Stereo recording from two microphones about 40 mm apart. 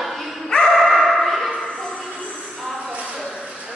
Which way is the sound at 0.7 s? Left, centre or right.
Centre.